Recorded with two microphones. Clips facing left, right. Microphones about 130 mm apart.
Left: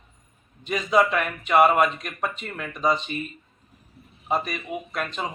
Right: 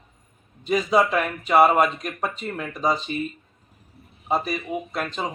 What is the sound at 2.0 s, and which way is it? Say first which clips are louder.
Speech: right 2 dB; 35° right (ahead or behind).